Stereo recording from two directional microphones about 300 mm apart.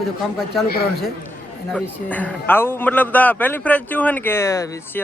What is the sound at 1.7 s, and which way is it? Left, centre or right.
A man's voice, centre.